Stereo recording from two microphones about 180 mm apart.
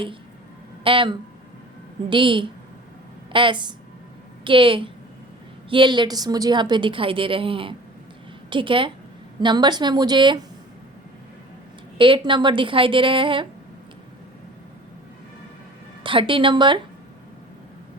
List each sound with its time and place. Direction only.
0.9 s a woman's voice: 30° right (ahead or behind)
11.9 s a woman's voice: 30° right (ahead or behind)
16.0 s a woman's voice: 30° right (ahead or behind)